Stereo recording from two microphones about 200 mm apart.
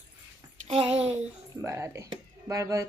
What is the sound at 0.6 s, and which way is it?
Speech, 30° right (ahead or behind).